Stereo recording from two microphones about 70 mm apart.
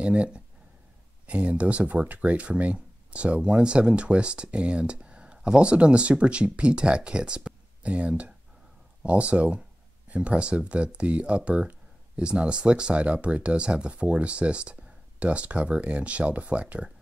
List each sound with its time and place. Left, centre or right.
0.0 s speech: centre